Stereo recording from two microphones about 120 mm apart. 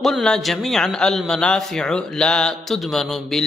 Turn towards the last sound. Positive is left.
turn(degrees=0)  # may be behind; listen again after turning